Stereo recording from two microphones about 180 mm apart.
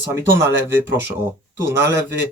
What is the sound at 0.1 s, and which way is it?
Speech, 15° right (ahead or behind).